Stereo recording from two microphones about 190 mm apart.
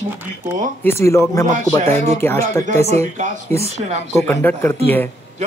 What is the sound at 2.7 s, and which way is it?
Music, 35° right (ahead or behind).